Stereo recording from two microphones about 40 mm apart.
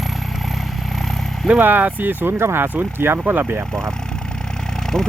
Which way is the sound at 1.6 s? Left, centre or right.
Right.